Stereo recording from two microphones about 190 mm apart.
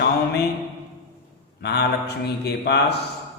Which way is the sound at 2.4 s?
60° left (ahead or behind).